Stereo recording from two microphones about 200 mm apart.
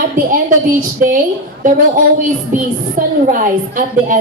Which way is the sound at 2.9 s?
40° right (ahead or behind).